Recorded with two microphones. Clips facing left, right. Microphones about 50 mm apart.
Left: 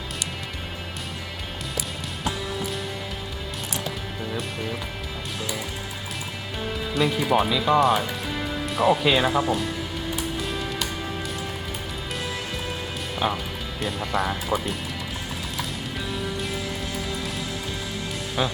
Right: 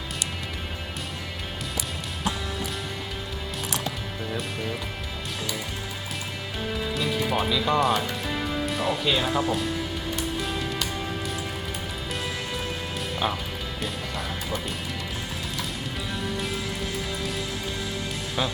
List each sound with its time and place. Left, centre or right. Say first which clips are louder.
4.3 s speech: even; centre
6.9 s speech: left 6 dB; centre
13.1 s music: left 3 dB; centre
14.5 s speech: left 6 dB; left
18.4 s speech: left 2 dB; centre